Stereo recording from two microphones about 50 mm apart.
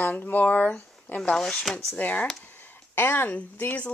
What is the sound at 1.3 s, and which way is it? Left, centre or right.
Speech, centre.